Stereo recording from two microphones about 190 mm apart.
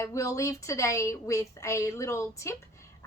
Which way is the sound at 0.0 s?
15° left (ahead or behind).